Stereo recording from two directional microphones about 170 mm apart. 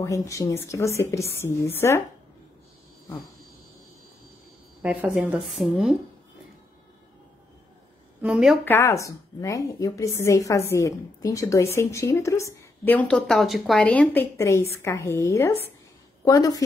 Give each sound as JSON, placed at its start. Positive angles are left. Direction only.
{"t": 0.0, "sound": "a woman's voice", "side_deg": 20}
{"t": 4.8, "sound": "speech", "side_deg": -10}
{"t": 8.2, "sound": "speech", "side_deg": -5}
{"t": 8.6, "sound": "a woman's voice", "side_deg": 15}